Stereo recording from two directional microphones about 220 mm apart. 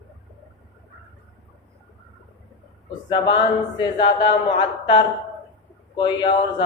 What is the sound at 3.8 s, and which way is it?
A man's voice, 20° left (ahead or behind).